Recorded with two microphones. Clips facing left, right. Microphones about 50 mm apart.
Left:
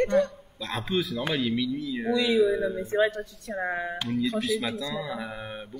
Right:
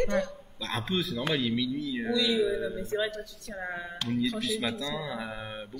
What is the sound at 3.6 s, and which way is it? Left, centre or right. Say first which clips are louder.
Speech: left 6 dB; left.